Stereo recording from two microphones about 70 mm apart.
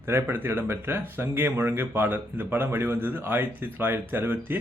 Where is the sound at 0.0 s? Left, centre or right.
Right.